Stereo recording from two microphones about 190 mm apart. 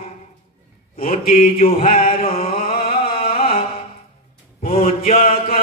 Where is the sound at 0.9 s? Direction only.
30° left (ahead or behind).